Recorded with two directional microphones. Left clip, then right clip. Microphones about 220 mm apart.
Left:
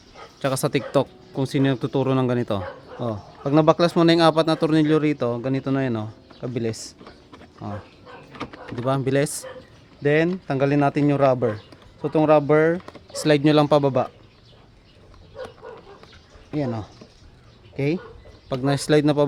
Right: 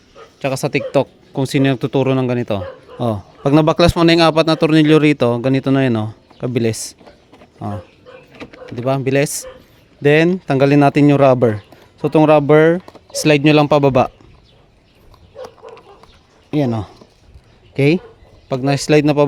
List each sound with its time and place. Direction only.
0.3 s speech: 20° right (ahead or behind)
1.4 s speech: 35° right (ahead or behind)
3.0 s speech: 40° right (ahead or behind)
8.7 s speech: 25° right (ahead or behind)
10.0 s speech: 50° right (ahead or behind)
16.5 s speech: 45° right (ahead or behind)
18.4 s speech: 30° right (ahead or behind)